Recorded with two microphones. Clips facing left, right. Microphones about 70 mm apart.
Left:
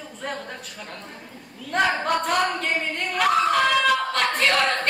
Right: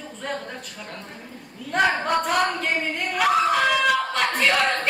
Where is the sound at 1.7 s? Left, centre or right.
Centre.